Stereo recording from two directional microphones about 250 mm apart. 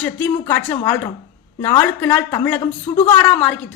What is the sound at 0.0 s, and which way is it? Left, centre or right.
Speech, centre.